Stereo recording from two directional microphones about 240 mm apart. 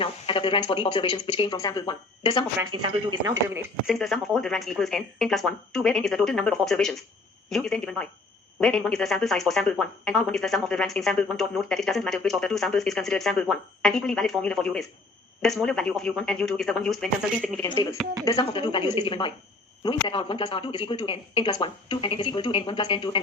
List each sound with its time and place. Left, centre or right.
0.0 s speech: left
2.8 s speech: centre
3.9 s speech: centre
18.3 s speech: centre